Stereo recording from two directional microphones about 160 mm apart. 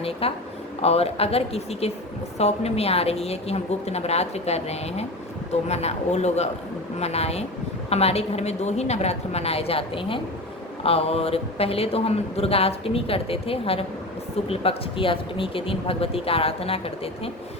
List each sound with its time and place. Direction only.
0.0 s a man's voice: 35° left (ahead or behind)